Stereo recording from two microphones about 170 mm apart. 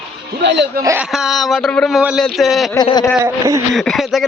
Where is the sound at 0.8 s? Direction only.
15° right (ahead or behind).